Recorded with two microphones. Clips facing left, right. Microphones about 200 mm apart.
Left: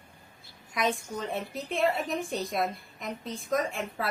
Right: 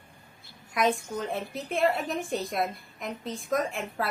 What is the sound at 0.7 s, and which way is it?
A woman's voice, centre (ahead or behind).